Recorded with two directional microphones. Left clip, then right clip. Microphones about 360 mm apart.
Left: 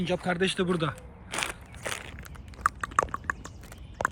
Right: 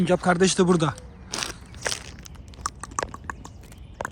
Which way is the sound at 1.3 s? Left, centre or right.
Centre.